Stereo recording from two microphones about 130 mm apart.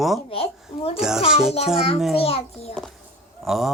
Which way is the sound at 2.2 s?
50° left (ahead or behind).